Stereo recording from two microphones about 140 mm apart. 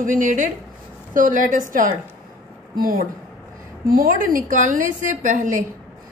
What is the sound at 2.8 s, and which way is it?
A woman's voice, 90° right.